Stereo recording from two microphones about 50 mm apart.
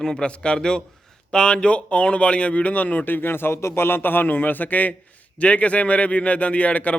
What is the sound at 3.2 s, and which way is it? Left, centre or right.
A man's voice, left.